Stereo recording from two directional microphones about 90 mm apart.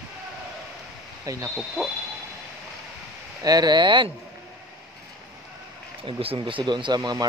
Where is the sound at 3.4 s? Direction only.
45° right (ahead or behind).